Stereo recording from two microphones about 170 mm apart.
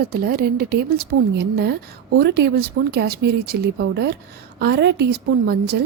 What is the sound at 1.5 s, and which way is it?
Speech, 75° right (ahead or behind).